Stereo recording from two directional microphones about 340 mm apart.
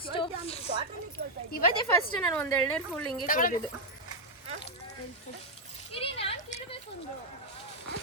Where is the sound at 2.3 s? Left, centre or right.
Centre.